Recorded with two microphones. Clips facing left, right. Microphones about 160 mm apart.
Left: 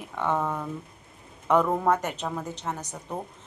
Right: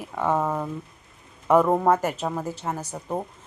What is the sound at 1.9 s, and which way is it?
A woman's voice, 5° right (ahead or behind).